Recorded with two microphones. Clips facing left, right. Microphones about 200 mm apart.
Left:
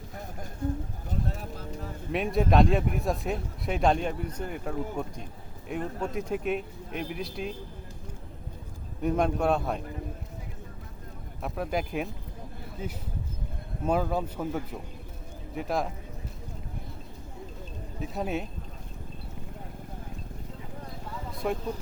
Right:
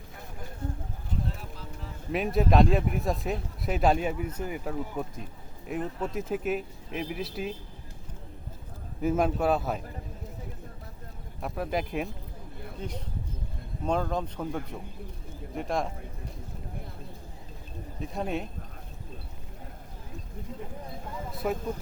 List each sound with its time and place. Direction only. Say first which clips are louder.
1.4 s music: left 5 dB; 45° left (ahead or behind)
2.1 s speech: even; centre (ahead or behind)
9.0 s speech: even; 5° right (ahead or behind)
11.4 s speech: even; centre (ahead or behind)
18.0 s speech: even; centre (ahead or behind)
21.3 s vehicle: even; centre (ahead or behind)